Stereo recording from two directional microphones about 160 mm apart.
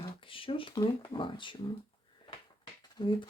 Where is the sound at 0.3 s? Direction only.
35° left (ahead or behind).